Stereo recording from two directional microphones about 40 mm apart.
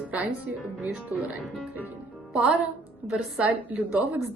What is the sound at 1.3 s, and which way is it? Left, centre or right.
Speech, right.